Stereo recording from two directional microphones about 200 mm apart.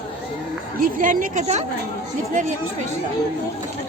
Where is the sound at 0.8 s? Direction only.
45° right (ahead or behind).